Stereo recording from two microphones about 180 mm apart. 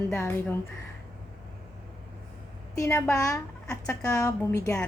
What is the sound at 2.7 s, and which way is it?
Speech, 15° left (ahead or behind).